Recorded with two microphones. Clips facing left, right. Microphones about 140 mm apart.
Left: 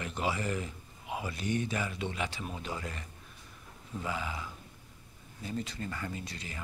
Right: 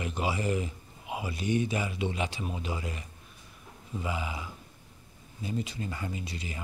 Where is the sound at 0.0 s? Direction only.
15° right (ahead or behind).